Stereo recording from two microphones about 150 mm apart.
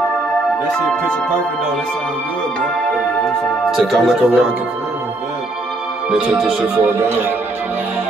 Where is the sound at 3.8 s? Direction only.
5° right (ahead or behind).